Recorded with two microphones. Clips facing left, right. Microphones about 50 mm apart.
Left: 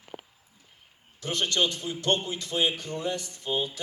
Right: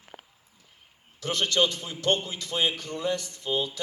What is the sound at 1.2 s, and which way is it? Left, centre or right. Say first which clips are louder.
A man's voice: right 2 dB; right.